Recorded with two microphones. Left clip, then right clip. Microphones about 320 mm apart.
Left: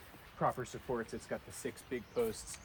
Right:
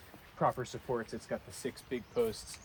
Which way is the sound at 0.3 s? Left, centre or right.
Centre.